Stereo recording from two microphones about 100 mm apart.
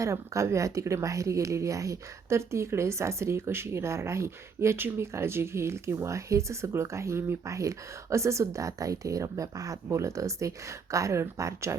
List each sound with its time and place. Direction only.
0.0 s speech: 30° right (ahead or behind)